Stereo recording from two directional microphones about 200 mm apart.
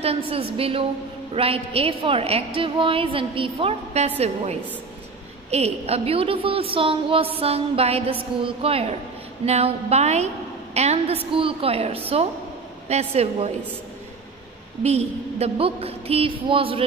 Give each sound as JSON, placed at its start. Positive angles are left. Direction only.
{"t": 0.0, "sound": "a woman's voice", "side_deg": -30}
{"t": 5.5, "sound": "a woman's voice", "side_deg": -30}
{"t": 14.8, "sound": "a woman's voice", "side_deg": -30}